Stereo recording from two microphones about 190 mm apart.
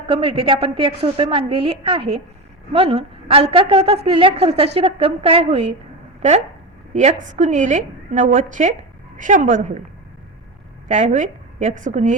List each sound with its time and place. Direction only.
0.1 s a woman's voice: 30° right (ahead or behind)
6.9 s a woman's voice: 35° right (ahead or behind)
10.8 s a woman's voice: 40° right (ahead or behind)